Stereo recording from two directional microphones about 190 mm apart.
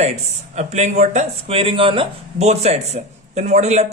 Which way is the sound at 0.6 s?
35° right (ahead or behind).